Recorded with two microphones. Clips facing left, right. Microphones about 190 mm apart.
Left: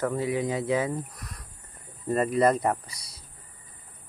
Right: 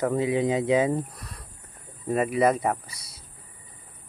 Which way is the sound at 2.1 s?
5° right (ahead or behind).